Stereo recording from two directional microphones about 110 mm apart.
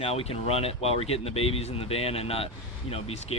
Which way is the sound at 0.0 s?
65° left (ahead or behind).